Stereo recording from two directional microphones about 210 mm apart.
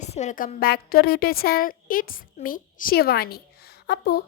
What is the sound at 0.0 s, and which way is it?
A woman's voice, 35° left (ahead or behind).